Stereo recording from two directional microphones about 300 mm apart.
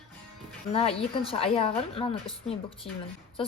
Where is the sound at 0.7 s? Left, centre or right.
Centre.